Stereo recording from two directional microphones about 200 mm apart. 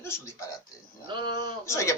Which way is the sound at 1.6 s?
15° left (ahead or behind).